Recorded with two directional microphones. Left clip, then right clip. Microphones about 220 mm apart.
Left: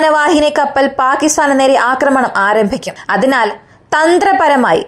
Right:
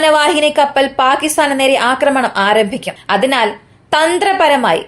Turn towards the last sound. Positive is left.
turn(degrees=30)  # may be behind; listen again after turning